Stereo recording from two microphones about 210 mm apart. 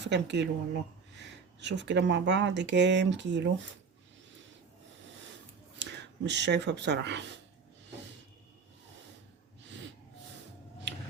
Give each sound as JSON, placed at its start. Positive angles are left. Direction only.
{"t": 0.0, "sound": "speech", "side_deg": -55}
{"t": 5.8, "sound": "speech", "side_deg": -55}